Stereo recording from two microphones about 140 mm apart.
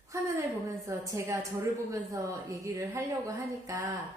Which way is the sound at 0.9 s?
20° right (ahead or behind).